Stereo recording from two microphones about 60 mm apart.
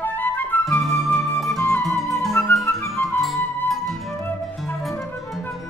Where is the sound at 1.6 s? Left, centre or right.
Left.